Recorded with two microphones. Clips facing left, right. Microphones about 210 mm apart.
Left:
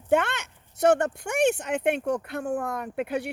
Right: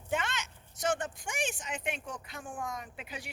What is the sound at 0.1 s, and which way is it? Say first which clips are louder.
Speech: left 11 dB; 60° left (ahead or behind).